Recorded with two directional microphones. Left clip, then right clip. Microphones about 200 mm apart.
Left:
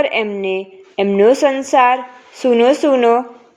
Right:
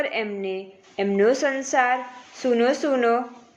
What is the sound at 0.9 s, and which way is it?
A woman's voice, 30° left (ahead or behind).